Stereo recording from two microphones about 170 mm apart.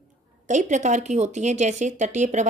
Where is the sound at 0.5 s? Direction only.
45° right (ahead or behind).